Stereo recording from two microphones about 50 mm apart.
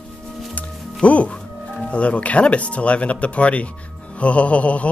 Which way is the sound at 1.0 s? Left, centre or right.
Left.